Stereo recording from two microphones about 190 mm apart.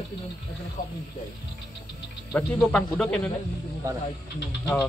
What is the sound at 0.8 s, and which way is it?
Speech, 45° left (ahead or behind).